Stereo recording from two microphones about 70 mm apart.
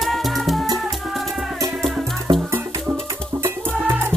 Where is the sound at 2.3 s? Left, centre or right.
Right.